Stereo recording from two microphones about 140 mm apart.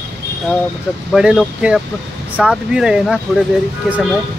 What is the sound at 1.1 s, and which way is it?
Speech, 5° right (ahead or behind).